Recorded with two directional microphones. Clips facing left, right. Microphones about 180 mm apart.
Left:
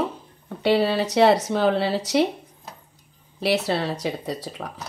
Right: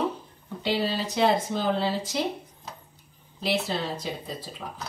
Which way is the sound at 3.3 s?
75° left (ahead or behind).